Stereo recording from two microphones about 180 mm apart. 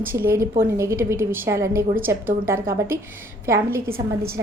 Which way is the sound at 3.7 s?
55° right (ahead or behind).